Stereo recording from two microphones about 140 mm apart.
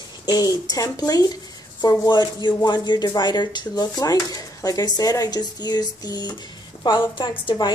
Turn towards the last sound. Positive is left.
turn(degrees=35)  # may be behind; listen again after turning